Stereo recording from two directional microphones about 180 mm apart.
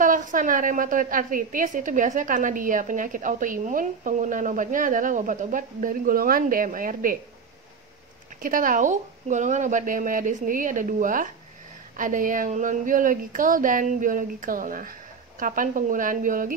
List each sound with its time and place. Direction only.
0.0 s a woman's voice: 45° right (ahead or behind)
8.4 s a woman's voice: 50° right (ahead or behind)